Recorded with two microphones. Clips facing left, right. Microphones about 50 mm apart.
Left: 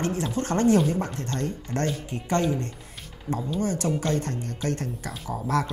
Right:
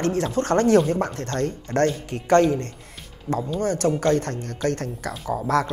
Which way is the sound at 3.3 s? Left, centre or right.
Left.